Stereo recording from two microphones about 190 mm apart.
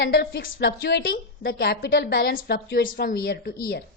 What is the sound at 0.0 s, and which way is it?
A woman's voice, 60° left (ahead or behind).